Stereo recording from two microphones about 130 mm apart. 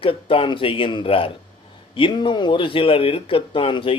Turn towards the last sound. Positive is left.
turn(degrees=40)  # may be behind; listen again after turning